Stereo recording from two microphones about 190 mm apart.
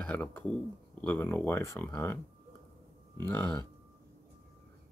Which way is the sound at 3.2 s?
10° left (ahead or behind).